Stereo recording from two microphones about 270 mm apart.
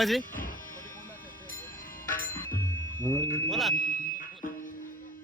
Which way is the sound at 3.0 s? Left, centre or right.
Centre.